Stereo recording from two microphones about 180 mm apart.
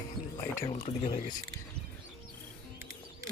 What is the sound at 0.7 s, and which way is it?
Speech, 30° left (ahead or behind).